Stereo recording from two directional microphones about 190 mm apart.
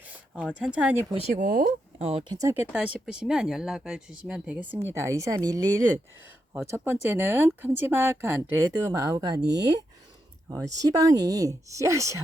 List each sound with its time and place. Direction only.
0.4 s speech: 5° right (ahead or behind)
1.4 s speech: 45° right (ahead or behind)
2.3 s speech: 15° right (ahead or behind)